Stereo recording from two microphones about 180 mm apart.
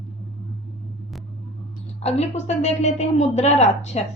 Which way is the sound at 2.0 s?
35° left (ahead or behind).